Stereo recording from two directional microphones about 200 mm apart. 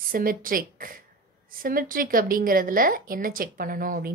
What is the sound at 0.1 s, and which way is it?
A woman's voice, 45° right (ahead or behind).